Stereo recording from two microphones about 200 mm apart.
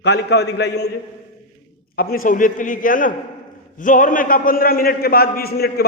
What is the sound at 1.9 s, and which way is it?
A man's voice, 45° left (ahead or behind).